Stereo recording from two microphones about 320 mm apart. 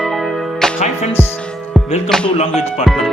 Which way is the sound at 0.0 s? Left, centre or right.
Centre.